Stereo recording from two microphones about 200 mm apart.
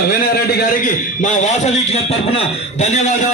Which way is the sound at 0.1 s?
50° left (ahead or behind).